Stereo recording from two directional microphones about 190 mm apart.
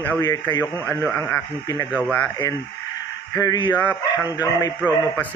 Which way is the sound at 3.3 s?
20° left (ahead or behind).